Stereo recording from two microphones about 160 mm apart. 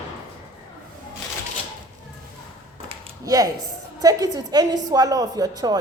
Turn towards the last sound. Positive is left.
turn(degrees=-25)  # may be behind; listen again after turning